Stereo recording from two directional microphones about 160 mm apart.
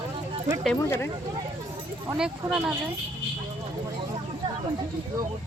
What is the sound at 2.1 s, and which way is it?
Speech, 5° right (ahead or behind).